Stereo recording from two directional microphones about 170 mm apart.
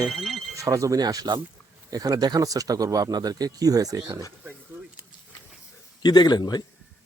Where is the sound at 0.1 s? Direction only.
Centre (ahead or behind).